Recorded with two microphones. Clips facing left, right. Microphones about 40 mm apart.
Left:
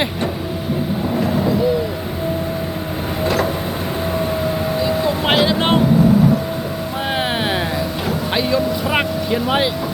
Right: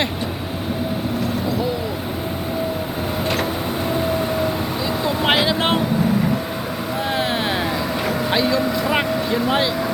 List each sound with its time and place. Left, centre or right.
5.0 s vehicle: centre
7.1 s vehicle: left
8.3 s speech: centre